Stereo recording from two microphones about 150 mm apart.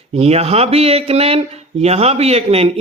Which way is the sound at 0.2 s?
45° right (ahead or behind).